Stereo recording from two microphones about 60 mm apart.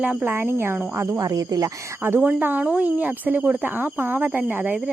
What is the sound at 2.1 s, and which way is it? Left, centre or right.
Speech, right.